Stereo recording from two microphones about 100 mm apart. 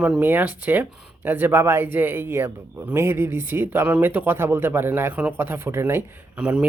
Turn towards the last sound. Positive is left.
turn(degrees=-10)  # may be behind; listen again after turning